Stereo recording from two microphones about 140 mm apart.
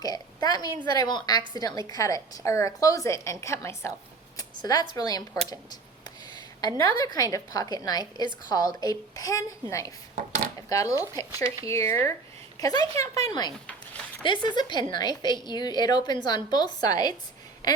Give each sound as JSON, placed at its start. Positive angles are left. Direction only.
{"t": 0.0, "sound": "a woman's voice", "side_deg": 25}
{"t": 13.7, "sound": "a sound", "side_deg": 10}
{"t": 14.3, "sound": "a woman's voice", "side_deg": 30}